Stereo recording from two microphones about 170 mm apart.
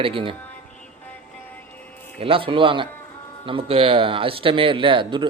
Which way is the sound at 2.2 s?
30° right (ahead or behind).